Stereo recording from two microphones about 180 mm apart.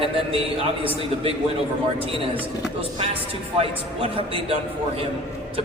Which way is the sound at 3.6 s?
30° right (ahead or behind).